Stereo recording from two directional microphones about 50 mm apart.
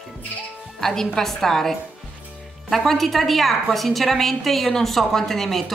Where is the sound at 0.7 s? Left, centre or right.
Centre.